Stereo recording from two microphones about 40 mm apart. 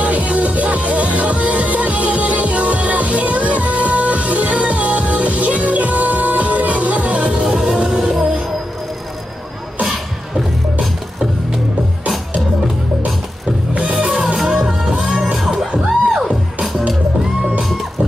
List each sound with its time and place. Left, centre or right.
0.0 s music: right
7.3 s music: centre
8.0 s music: centre
14.1 s music: centre
14.9 s music: right
15.3 s music: centre